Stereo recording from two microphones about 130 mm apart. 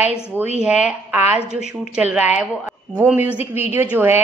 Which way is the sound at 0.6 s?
5° right (ahead or behind).